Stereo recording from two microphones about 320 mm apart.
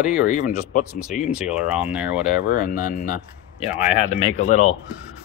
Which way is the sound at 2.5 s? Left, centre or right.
Left.